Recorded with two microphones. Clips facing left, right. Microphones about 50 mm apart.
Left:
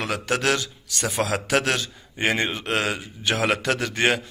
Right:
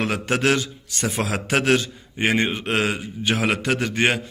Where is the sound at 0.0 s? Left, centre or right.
Right.